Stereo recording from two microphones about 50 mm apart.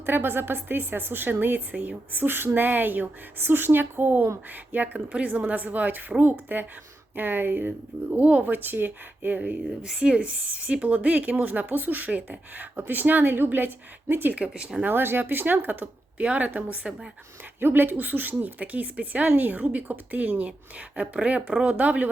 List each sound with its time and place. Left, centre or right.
0.0 s a woman's voice: right
4.9 s speech: right
8.1 s speech: right
9.8 s speech: centre; by 14.3 s right
14.3 s speech: right
14.8 s speech: right
17.6 s speech: right